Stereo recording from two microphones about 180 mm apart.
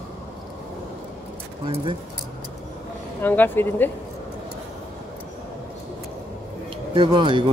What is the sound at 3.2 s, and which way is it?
Speech, 10° left (ahead or behind).